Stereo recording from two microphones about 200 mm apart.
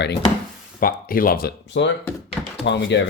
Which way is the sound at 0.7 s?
45° left (ahead or behind).